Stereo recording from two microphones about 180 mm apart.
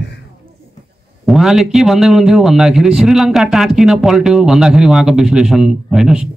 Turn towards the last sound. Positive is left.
turn(degrees=0)  # may be behind; listen again after turning